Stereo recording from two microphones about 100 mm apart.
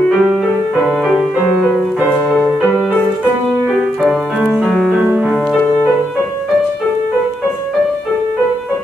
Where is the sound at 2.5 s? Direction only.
5° right (ahead or behind).